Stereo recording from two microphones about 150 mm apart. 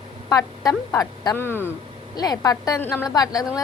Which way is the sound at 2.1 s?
25° left (ahead or behind).